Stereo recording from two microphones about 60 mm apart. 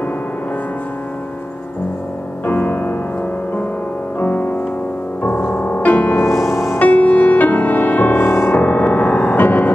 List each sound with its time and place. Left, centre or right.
2.4 s music: left
4.2 s music: left
6.2 s music: left
6.8 s music: left
8.3 s music: left